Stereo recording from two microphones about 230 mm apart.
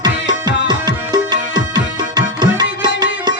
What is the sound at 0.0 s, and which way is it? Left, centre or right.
Music, centre.